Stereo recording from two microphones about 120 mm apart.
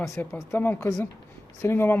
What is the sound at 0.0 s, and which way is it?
Speech, 20° left (ahead or behind).